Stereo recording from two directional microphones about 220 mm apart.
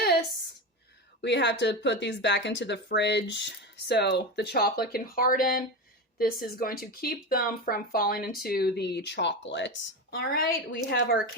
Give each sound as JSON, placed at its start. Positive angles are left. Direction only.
{"t": 1.2, "sound": "speech", "side_deg": 55}